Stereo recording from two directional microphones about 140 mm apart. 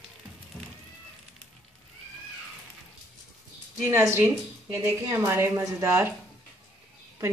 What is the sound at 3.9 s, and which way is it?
A woman's voice, 20° right (ahead or behind).